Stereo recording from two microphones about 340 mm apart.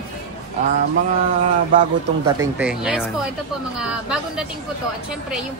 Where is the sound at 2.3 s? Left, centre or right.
Centre.